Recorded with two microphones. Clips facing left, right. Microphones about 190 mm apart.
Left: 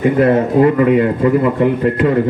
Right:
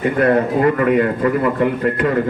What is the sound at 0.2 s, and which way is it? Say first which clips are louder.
A man's voice: left 2 dB; 20° left (ahead or behind).